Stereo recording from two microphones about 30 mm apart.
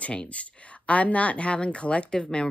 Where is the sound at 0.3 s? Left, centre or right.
Left.